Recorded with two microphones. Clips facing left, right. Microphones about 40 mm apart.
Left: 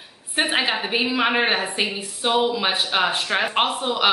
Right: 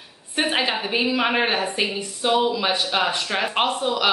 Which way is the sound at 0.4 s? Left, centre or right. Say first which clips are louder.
Left 1 dB; centre.